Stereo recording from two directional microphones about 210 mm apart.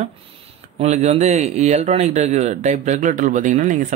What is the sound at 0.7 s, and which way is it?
A man's voice, 30° right (ahead or behind).